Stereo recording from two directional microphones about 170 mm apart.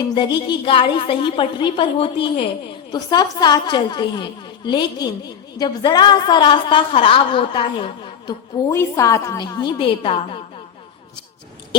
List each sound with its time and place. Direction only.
0.0 s a woman's voice: 25° left (ahead or behind)
8.7 s a woman's voice: 15° left (ahead or behind)